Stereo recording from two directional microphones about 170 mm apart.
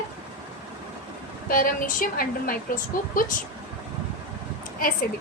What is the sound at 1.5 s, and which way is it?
A woman's voice, 55° left (ahead or behind).